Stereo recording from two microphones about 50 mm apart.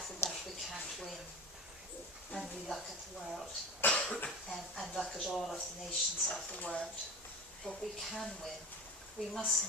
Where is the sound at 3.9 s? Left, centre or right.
Left.